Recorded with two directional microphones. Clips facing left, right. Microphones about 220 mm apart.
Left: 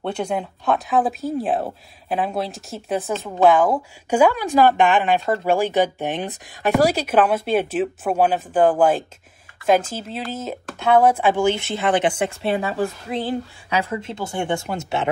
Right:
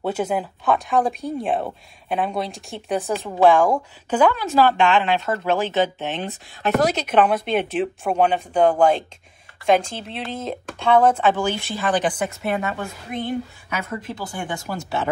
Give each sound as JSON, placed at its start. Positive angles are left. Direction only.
{"t": 0.0, "sound": "speech", "side_deg": -5}
{"t": 11.4, "sound": "a woman's voice", "side_deg": 25}